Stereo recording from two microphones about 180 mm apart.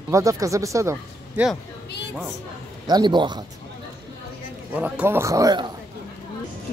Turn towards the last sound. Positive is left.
turn(degrees=-20)  # may be behind; listen again after turning